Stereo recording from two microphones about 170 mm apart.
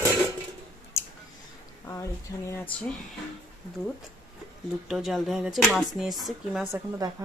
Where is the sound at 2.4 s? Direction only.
15° left (ahead or behind).